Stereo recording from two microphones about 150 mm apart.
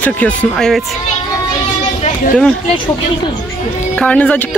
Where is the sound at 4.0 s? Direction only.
5° left (ahead or behind).